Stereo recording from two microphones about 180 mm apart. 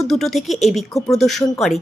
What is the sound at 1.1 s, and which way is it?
Speech, centre (ahead or behind).